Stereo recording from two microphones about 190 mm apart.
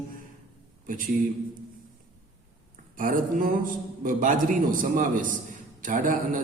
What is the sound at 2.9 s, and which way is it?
A man's voice, 45° right (ahead or behind).